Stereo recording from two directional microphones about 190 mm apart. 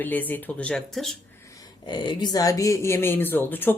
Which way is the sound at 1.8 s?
25° left (ahead or behind).